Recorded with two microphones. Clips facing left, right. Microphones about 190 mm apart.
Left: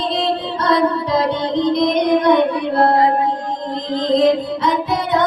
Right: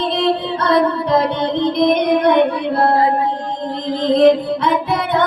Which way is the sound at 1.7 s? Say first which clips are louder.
Right 1 dB; 60° right (ahead or behind).